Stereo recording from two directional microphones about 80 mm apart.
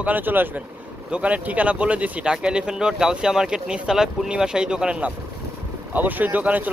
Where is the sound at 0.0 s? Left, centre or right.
Right.